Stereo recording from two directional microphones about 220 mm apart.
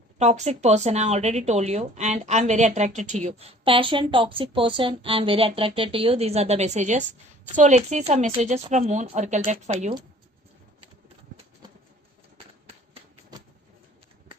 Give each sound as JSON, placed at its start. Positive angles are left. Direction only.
{"t": 0.2, "sound": "speech", "side_deg": -30}